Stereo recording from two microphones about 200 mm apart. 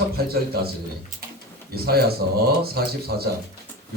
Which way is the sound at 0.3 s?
50° right (ahead or behind).